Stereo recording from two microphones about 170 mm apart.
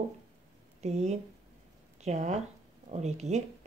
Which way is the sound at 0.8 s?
40° right (ahead or behind).